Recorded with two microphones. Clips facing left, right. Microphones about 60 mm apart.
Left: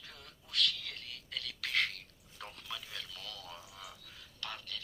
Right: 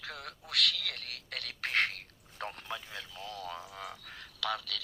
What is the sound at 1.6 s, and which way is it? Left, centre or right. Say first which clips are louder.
Speech: right 4 dB; right.